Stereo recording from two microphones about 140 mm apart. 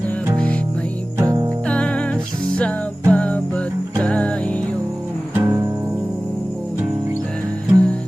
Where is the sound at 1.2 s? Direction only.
25° right (ahead or behind).